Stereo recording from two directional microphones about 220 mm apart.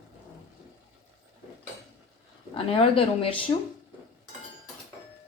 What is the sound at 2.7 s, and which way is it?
Speech, 25° left (ahead or behind).